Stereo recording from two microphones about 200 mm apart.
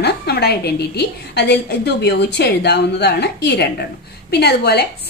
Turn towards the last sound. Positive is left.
turn(degrees=50)  # may be behind; listen again after turning